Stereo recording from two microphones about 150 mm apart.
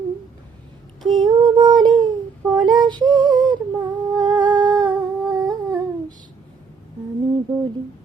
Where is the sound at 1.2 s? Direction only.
30° right (ahead or behind).